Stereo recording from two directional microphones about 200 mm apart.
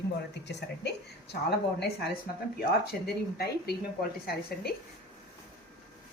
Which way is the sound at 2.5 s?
50° left (ahead or behind).